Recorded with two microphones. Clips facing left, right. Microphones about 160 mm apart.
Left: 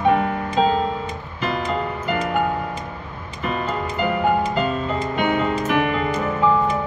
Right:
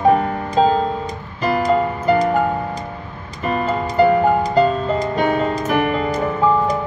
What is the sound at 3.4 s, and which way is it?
Music, 40° right (ahead or behind).